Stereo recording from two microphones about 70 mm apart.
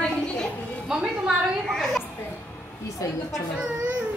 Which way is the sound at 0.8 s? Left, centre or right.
Centre.